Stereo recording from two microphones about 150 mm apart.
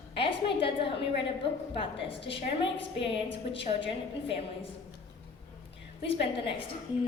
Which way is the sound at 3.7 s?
35° left (ahead or behind).